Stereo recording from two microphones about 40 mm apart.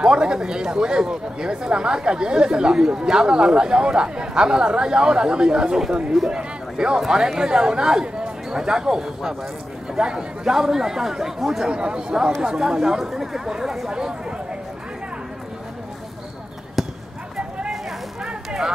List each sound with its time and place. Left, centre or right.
0.0 s speech: right
11.7 s speech: right
16.8 s basketball bounce: centre
18.2 s a sound: centre